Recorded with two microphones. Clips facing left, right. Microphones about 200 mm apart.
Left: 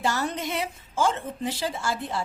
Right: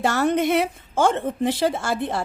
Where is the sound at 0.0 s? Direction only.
60° right (ahead or behind).